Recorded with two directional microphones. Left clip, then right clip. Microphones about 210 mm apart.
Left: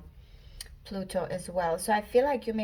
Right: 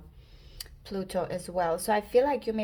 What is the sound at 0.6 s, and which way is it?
Speech, 35° right (ahead or behind).